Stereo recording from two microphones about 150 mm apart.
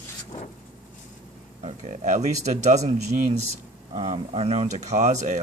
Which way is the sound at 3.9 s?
45° right (ahead or behind).